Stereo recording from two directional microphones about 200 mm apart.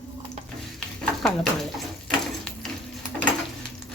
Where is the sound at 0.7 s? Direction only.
Centre (ahead or behind).